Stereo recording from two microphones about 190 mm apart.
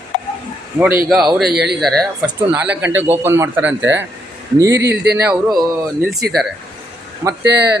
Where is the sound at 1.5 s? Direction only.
60° right (ahead or behind).